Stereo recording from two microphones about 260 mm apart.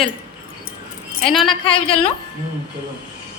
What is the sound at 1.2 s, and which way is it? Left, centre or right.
Speech, centre.